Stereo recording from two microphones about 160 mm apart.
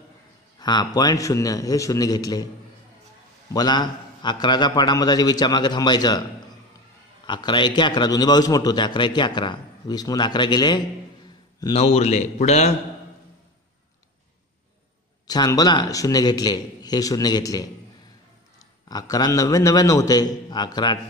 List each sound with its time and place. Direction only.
0.6 s a man's voice: 25° left (ahead or behind)
3.5 s a man's voice: 25° left (ahead or behind)
7.2 s a man's voice: 30° left (ahead or behind)
11.7 s a man's voice: 40° left (ahead or behind)
15.2 s a man's voice: 25° left (ahead or behind)
18.9 s a man's voice: 25° left (ahead or behind)